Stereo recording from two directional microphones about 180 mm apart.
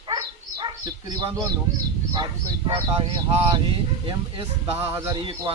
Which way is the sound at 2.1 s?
25° right (ahead or behind).